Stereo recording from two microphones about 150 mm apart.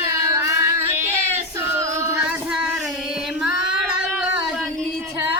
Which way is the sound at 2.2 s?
5° right (ahead or behind).